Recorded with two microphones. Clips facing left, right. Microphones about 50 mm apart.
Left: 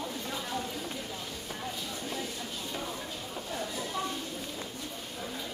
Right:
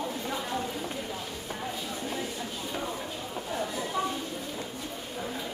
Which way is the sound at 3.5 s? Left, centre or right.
Centre.